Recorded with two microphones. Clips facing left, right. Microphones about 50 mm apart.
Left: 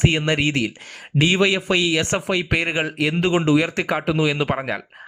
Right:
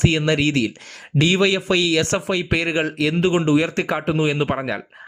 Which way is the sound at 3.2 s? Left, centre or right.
Left.